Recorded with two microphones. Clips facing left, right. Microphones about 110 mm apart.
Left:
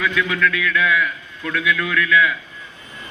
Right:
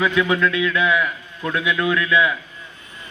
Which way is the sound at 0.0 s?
25° right (ahead or behind).